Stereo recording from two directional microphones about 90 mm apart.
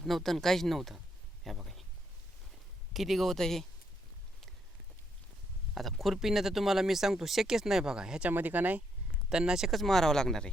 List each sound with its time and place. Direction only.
0.0 s speech: centre (ahead or behind)
2.9 s speech: centre (ahead or behind)
5.7 s speech: centre (ahead or behind)
8.3 s speech: 20° right (ahead or behind)
9.3 s speech: 10° right (ahead or behind)